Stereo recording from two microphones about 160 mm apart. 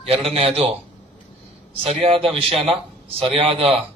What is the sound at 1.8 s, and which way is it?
Speech, 35° right (ahead or behind).